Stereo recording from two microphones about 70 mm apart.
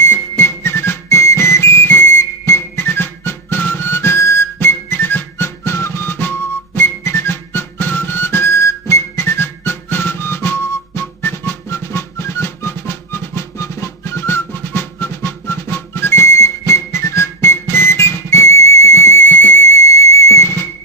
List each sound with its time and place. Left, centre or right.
0.1 s whistle: left
5.6 s music: left
20.0 s music: left